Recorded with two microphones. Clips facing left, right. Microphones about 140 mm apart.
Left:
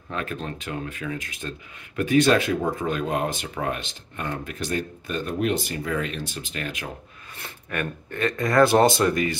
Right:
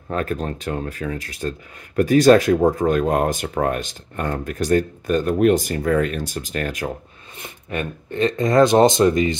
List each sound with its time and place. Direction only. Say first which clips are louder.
0.1 s speech: right 7 dB; 45° right (ahead or behind)
7.3 s speech: right 3 dB; 20° right (ahead or behind)